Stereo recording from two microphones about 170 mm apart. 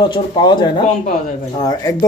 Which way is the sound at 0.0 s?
25° left (ahead or behind).